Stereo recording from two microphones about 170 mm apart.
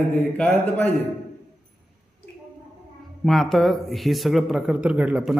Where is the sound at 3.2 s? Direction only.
Centre (ahead or behind).